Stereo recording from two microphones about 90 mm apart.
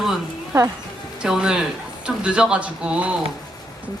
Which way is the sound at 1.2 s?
10° right (ahead or behind).